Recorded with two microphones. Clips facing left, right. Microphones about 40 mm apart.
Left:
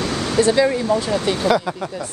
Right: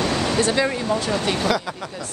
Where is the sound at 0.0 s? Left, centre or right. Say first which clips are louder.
Right 1 dB; right.